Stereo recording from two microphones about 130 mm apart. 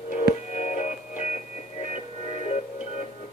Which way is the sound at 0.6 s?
60° left (ahead or behind).